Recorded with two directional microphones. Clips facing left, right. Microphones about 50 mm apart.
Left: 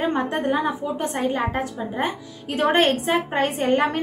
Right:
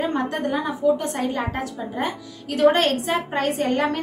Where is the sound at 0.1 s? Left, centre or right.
Left.